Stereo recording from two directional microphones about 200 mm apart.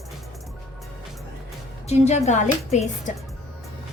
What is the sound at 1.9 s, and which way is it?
A woman's voice, 35° left (ahead or behind).